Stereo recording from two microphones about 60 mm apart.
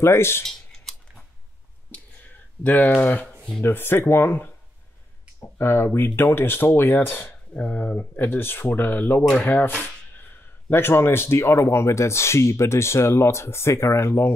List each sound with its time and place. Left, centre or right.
0.0 s speech: left
0.4 s a sound: centre
1.9 s a sound: left
2.6 s speech: left
3.6 s speech: left
5.6 s speech: left
7.5 s speech: left
8.2 s speech: left